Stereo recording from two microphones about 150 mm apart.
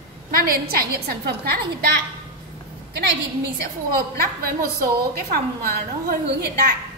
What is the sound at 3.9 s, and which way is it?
A woman's voice, 80° right.